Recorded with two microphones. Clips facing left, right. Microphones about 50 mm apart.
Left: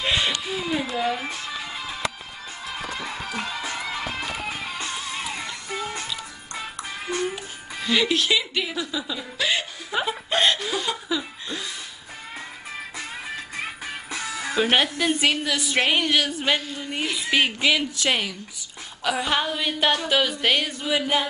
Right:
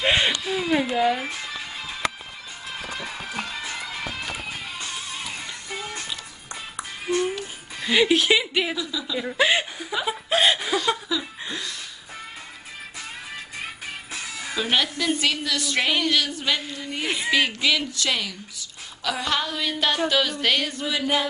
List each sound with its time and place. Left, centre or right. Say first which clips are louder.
0.0 s a sound: right 3 dB; right
0.8 s speech: right 4 dB; centre
7.8 s a woman's voice: right 2 dB; centre
8.7 s speech: left 1 dB; left
9.2 s chuckle: right 6 dB; right
10.0 s chuckle: right 2 dB; centre
11.1 s chuckle: left 1 dB; centre
14.1 s speech: left 5 dB; left
17.0 s speech: right 2 dB; right
17.3 s speech: left 1 dB; centre
19.0 s a sound: left 2 dB; centre